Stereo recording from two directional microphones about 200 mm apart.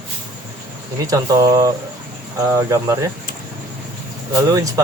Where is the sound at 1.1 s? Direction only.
20° right (ahead or behind).